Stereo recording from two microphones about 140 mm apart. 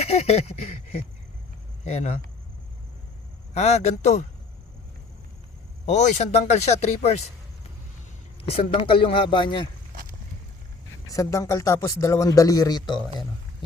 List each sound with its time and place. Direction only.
0.0 s a sound: 45° left (ahead or behind)
1.8 s speech: 50° left (ahead or behind)
3.5 s speech: 50° left (ahead or behind)
5.8 s speech: 55° left (ahead or behind)
8.4 s speech: 45° left (ahead or behind)
9.9 s a sound: 90° right
11.1 s speech: 20° left (ahead or behind)